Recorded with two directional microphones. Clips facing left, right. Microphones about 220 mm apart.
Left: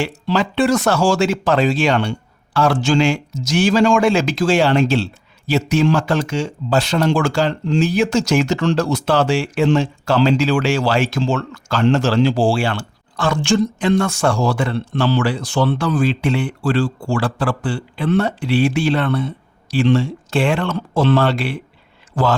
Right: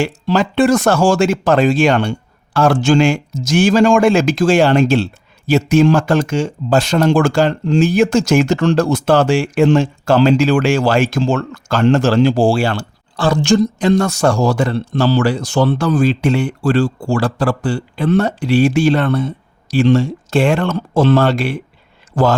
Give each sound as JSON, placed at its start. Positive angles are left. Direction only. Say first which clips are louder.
{"t": 0.0, "sound": "a man's voice", "louder": "right 3 dB", "side_deg": -45}